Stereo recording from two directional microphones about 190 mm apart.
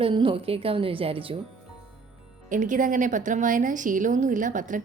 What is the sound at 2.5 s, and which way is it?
Speech, 45° right (ahead or behind).